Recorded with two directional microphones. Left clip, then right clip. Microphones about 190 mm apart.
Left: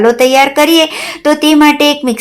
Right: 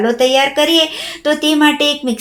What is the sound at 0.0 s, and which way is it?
Speech, 35° left (ahead or behind).